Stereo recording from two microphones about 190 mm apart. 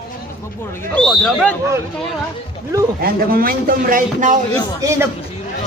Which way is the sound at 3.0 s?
50° right (ahead or behind).